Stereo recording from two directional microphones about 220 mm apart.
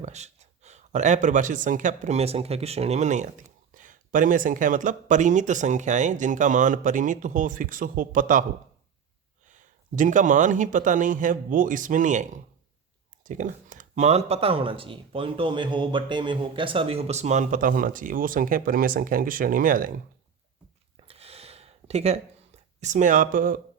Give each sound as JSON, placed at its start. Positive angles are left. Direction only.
{"t": 0.0, "sound": "speech", "side_deg": -30}
{"t": 9.5, "sound": "speech", "side_deg": -35}
{"t": 20.9, "sound": "a sound", "side_deg": -25}